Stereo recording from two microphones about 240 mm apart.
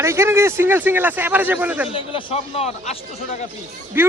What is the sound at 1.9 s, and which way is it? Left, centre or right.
Speech, left.